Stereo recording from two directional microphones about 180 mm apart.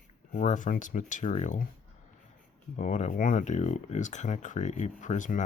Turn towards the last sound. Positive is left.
turn(degrees=45)  # may be behind; listen again after turning